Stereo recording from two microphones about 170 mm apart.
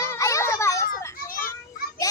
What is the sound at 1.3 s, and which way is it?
Children playing, 55° left (ahead or behind).